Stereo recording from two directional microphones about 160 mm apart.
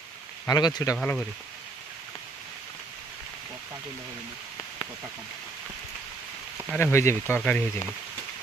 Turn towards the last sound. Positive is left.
turn(degrees=5)  # may be behind; listen again after turning